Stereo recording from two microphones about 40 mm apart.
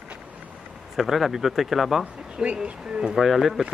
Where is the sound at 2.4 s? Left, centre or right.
Right.